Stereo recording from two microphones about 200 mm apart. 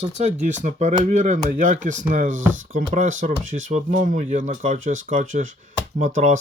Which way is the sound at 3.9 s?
40° right (ahead or behind).